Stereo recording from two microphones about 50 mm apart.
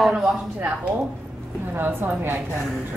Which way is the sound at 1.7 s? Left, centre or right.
Right.